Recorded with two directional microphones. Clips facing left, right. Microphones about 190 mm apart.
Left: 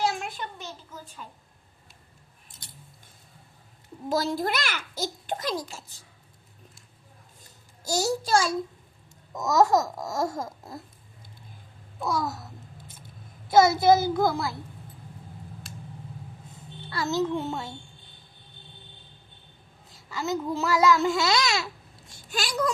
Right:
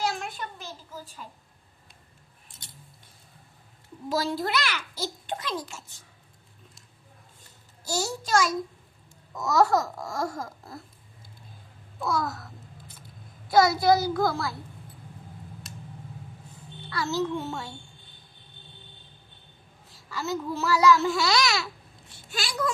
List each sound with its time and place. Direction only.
0.6 s a sound: centre (ahead or behind)
4.1 s a child's voice: 45° left (ahead or behind)
7.9 s a child's voice: 40° left (ahead or behind)
9.3 s speech: 20° left (ahead or behind)
11.9 s speech: 20° left (ahead or behind)
13.5 s speech: 20° left (ahead or behind)
16.9 s speech: 20° left (ahead or behind)
20.1 s speech: 20° left (ahead or behind)
22.3 s speech: 45° left (ahead or behind)